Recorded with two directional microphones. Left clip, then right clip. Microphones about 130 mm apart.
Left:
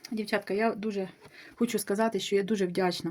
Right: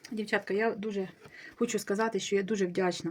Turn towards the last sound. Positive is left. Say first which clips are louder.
# left 1 dB
turn(degrees=35)  # may be behind; listen again after turning